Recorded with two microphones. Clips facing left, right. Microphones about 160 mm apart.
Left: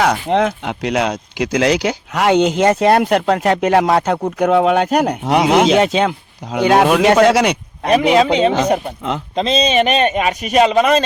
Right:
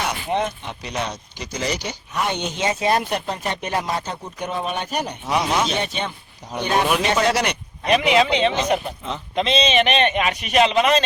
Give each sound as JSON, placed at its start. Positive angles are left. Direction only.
{"t": 0.0, "sound": "speech", "side_deg": 90}
{"t": 7.9, "sound": "a man's voice", "side_deg": 40}